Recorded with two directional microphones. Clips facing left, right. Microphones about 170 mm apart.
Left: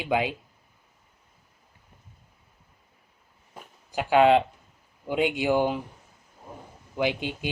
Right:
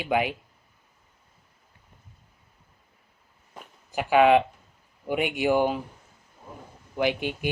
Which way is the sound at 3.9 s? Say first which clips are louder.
Even; 20° left (ahead or behind).